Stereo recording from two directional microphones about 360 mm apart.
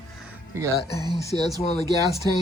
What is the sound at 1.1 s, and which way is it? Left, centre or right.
Speech, centre.